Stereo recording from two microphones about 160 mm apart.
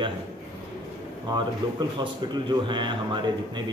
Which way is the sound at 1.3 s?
25° right (ahead or behind).